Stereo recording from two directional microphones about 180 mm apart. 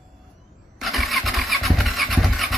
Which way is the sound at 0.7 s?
Centre (ahead or behind).